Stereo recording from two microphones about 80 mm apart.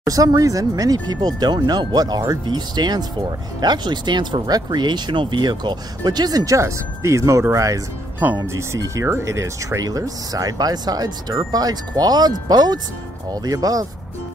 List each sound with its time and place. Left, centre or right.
0.0 s speech: right